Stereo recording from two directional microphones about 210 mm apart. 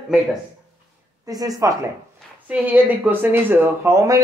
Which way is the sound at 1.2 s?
15° right (ahead or behind).